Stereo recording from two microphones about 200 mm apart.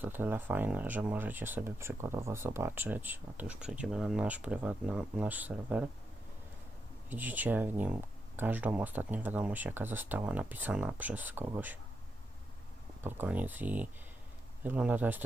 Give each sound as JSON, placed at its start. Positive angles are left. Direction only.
{"t": 0.0, "sound": "speech", "side_deg": -10}
{"t": 7.1, "sound": "speech", "side_deg": -10}
{"t": 13.0, "sound": "speech", "side_deg": -10}